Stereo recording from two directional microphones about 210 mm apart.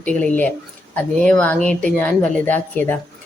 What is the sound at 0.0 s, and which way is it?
A woman's voice, 5° left (ahead or behind).